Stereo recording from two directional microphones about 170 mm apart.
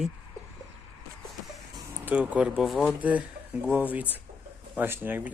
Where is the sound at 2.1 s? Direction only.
10° right (ahead or behind).